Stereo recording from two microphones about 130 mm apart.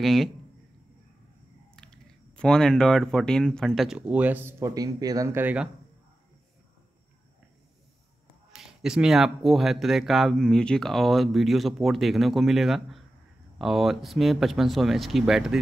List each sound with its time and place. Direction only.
0.0 s speech: centre (ahead or behind)
1.8 s speech: 5° left (ahead or behind); by 5.4 s 25° right (ahead or behind)
5.4 s speech: 10° right (ahead or behind)
8.5 s speech: 5° right (ahead or behind)